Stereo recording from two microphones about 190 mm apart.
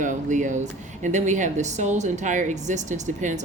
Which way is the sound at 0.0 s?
40° right (ahead or behind).